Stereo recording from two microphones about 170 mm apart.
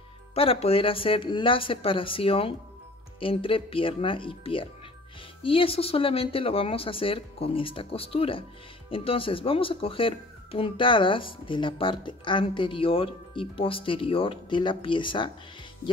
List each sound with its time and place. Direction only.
0.3 s speech: 35° left (ahead or behind)